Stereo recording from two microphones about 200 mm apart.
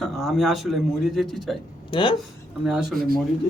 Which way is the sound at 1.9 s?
25° left (ahead or behind).